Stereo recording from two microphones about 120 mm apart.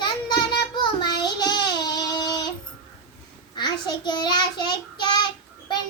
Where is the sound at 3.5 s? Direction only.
35° left (ahead or behind).